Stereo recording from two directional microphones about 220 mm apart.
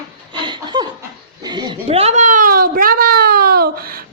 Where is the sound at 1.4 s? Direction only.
20° right (ahead or behind).